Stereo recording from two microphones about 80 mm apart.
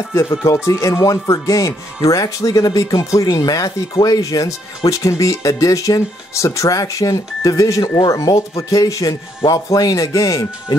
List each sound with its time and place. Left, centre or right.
0.1 s speech: left